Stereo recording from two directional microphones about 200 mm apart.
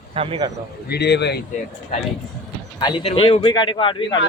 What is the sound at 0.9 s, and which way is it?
Speech, 55° left (ahead or behind).